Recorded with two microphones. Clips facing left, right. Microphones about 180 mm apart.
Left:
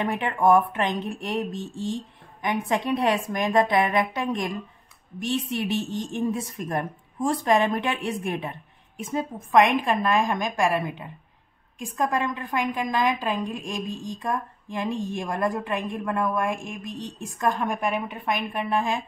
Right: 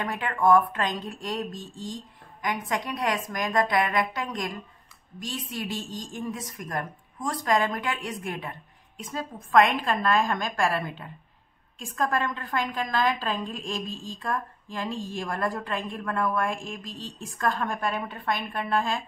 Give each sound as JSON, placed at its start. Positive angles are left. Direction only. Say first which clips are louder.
{"t": 0.0, "sound": "a woman's voice", "louder": "left 3 dB", "side_deg": 25}